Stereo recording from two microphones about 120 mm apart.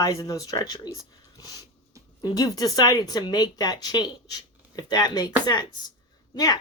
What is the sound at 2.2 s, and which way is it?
Speech, 30° left (ahead or behind).